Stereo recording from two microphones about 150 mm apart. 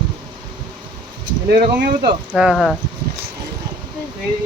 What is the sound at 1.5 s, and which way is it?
Speech, 65° right (ahead or behind).